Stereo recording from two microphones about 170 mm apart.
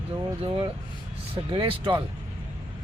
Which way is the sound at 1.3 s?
30° right (ahead or behind).